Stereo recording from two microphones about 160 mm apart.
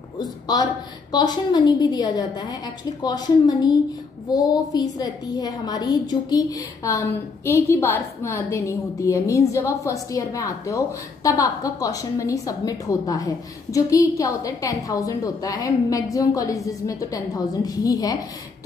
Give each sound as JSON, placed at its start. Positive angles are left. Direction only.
{"t": 0.2, "sound": "a woman's voice", "side_deg": 25}